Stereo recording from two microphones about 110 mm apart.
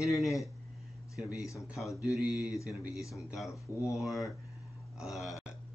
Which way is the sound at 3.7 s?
20° right (ahead or behind).